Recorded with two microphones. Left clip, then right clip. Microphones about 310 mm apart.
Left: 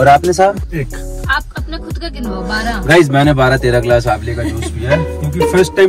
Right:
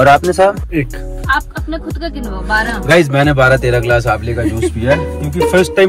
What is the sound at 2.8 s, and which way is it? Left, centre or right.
Speech, centre.